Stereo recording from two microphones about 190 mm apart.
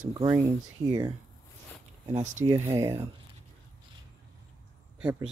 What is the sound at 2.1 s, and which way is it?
Speech, 40° right (ahead or behind).